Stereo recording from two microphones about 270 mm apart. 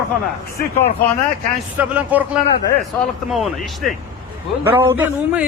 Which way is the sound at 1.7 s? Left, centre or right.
Centre.